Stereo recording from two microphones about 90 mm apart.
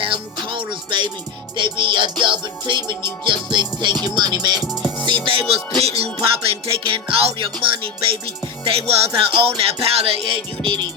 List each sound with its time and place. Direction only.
0.0 s music: 70° right (ahead or behind); by 4.6 s 50° right (ahead or behind)
4.6 s music: centre (ahead or behind)
5.0 s music: 70° right (ahead or behind); by 7.5 s 85° right
8.6 s music: 90° right
10.6 s music: 60° right (ahead or behind)